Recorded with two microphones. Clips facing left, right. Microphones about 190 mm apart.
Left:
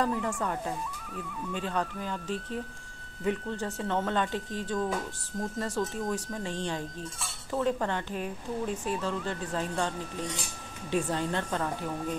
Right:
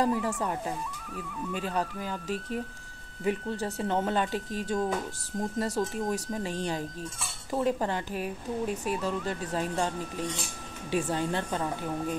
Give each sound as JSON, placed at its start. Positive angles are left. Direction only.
{"t": 0.0, "sound": "speech", "side_deg": -5}
{"t": 1.1, "sound": "speech", "side_deg": -5}